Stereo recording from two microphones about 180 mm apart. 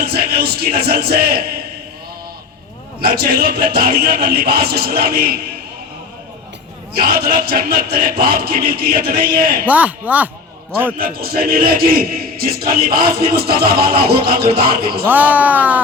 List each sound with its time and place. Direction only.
0.0 s a man's voice: 60° right (ahead or behind)
3.0 s a man's voice: 55° right (ahead or behind)
6.9 s a man's voice: 55° right (ahead or behind)
9.6 s speech: 10° right (ahead or behind)
10.9 s a man's voice: 55° right (ahead or behind)
15.0 s speech: 10° right (ahead or behind)